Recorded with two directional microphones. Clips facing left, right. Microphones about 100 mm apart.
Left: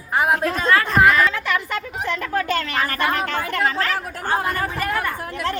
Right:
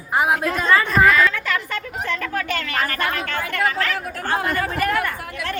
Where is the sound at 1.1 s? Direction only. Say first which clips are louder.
Even; 25° left (ahead or behind).